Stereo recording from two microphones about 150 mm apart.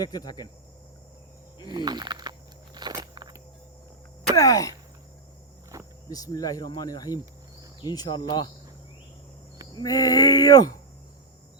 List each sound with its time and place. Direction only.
0.0 s speech: 25° left (ahead or behind)
1.7 s speech: 30° right (ahead or behind)
2.7 s walk: 25° right (ahead or behind)
4.4 s speech: 25° left (ahead or behind)
5.7 s cricket: 20° right (ahead or behind)
6.1 s speech: 25° left (ahead or behind)
9.7 s speech: 25° left (ahead or behind)